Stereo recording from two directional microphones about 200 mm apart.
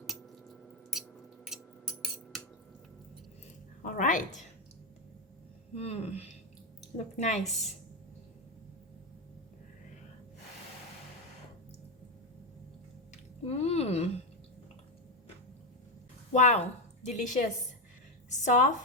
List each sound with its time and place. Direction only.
1.5 s a sound: centre (ahead or behind)
3.8 s speech: 40° left (ahead or behind)
5.7 s speech: 30° left (ahead or behind)
7.4 s a woman's voice: centre (ahead or behind)
13.4 s squish: 30° left (ahead or behind)
16.3 s a woman's voice: 35° left (ahead or behind)
18.3 s a sound: 40° left (ahead or behind)